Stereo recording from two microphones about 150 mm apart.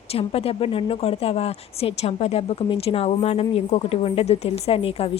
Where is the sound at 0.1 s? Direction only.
40° left (ahead or behind).